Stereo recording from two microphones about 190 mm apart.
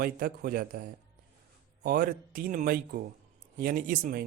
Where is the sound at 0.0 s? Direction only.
50° right (ahead or behind).